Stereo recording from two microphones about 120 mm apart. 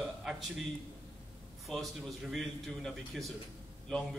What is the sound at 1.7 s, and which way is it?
A man's voice, centre (ahead or behind).